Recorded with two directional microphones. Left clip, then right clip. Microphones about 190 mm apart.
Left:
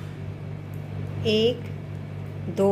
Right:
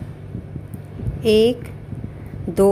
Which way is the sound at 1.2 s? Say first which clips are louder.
Right 7 dB; 60° right (ahead or behind).